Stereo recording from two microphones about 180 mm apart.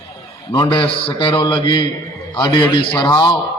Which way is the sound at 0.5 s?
25° left (ahead or behind).